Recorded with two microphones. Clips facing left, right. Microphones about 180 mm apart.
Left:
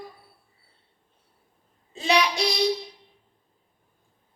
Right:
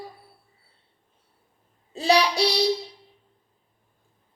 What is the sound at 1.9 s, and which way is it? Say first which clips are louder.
Child singing: right 3 dB; 35° right (ahead or behind).